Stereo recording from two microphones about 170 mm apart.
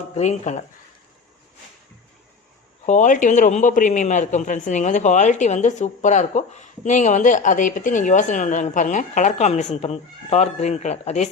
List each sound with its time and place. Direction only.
0.2 s a man's voice: 45° left (ahead or behind)
2.8 s a man's voice: 45° left (ahead or behind)